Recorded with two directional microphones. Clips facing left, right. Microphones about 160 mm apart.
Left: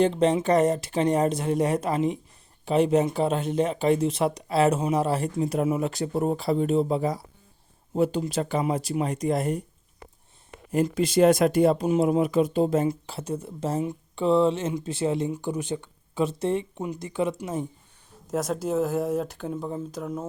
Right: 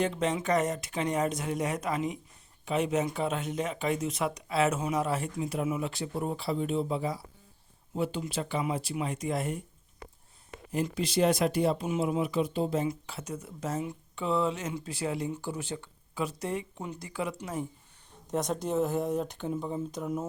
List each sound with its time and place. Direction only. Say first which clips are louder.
0.0 s speech: left 8 dB; 30° left (ahead or behind)
10.8 s speech: left 7 dB; 45° left (ahead or behind)
12.9 s speech: left 7 dB; 30° left (ahead or behind)
18.3 s speech: left 4 dB; centre (ahead or behind)